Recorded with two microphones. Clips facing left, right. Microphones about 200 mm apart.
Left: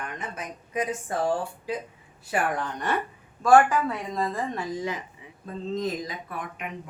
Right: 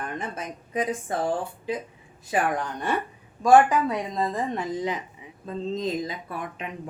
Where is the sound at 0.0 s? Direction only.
30° right (ahead or behind).